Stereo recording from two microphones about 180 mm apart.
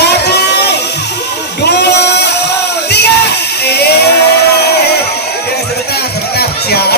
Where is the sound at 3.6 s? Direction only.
65° left (ahead or behind).